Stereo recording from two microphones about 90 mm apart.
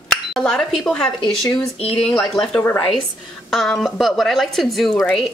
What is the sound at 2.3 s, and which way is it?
Speech, 5° left (ahead or behind).